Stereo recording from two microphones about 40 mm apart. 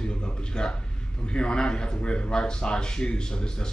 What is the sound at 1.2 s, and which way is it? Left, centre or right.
Speech, left.